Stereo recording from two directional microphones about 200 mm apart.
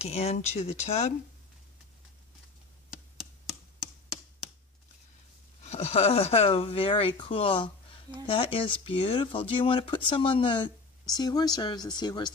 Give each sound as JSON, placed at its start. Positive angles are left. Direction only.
{"t": 0.0, "sound": "speech", "side_deg": 30}
{"t": 5.6, "sound": "speech", "side_deg": 30}